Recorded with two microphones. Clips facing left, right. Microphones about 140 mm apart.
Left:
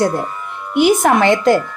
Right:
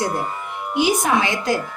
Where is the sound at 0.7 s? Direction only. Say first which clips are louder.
Left 6 dB; 60° left (ahead or behind).